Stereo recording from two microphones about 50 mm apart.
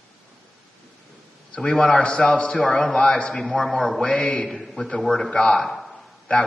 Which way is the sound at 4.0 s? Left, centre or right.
Left.